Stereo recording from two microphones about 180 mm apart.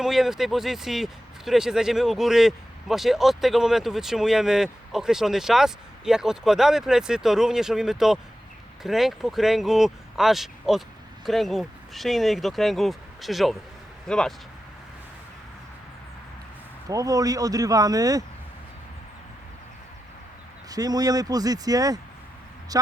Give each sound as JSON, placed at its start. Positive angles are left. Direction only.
{"t": 0.0, "sound": "speech", "side_deg": 0}
{"t": 16.9, "sound": "speech", "side_deg": -20}
{"t": 20.7, "sound": "speech", "side_deg": -20}